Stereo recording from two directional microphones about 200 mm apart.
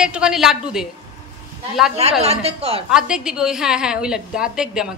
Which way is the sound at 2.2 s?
30° right (ahead or behind).